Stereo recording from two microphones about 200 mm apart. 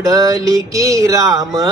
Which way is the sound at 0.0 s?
15° right (ahead or behind).